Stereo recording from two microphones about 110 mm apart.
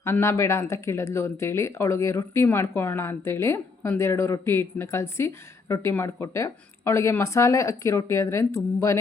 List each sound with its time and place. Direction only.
0.0 s speech: 20° left (ahead or behind)